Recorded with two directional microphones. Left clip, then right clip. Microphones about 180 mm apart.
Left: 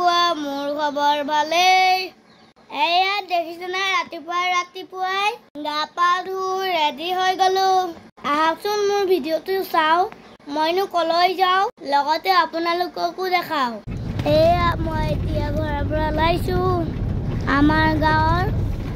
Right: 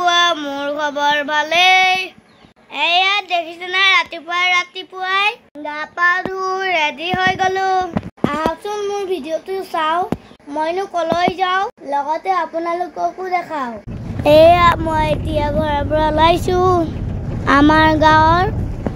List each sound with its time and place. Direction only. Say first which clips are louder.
0.0 s a sound: right 4 dB; 5° left (ahead or behind)
0.5 s child singing: right 3 dB; 5° right (ahead or behind)
2.7 s a child's voice: right 4 dB; 10° left (ahead or behind)
6.3 s speech: right 3 dB; 35° right (ahead or behind)
7.1 s speech: right 1 dB; centre (ahead or behind)
8.2 s a child's voice: even; 15° left (ahead or behind)
14.2 s speech: right 8 dB; 30° right (ahead or behind)